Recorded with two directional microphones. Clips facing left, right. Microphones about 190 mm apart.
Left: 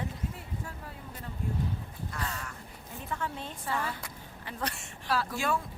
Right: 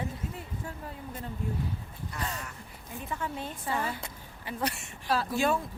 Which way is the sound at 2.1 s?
20° right (ahead or behind).